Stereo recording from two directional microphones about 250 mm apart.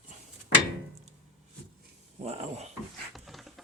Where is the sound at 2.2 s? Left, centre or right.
Right.